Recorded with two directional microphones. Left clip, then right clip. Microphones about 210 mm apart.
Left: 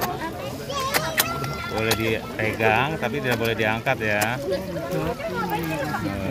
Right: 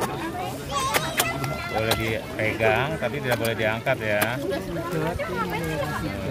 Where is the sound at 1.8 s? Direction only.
15° left (ahead or behind).